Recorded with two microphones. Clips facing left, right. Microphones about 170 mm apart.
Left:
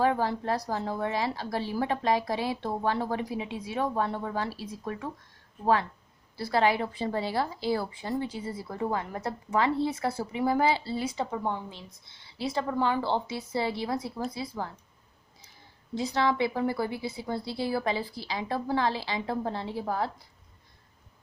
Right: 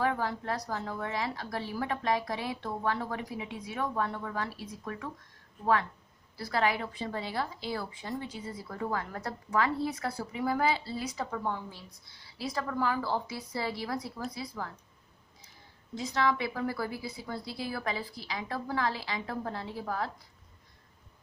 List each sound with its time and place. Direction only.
0.0 s a woman's voice: 30° left (ahead or behind)
6.3 s a woman's voice: 30° left (ahead or behind)
16.0 s a woman's voice: 30° left (ahead or behind)